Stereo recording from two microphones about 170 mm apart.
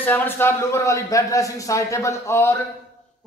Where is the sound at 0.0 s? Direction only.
10° left (ahead or behind).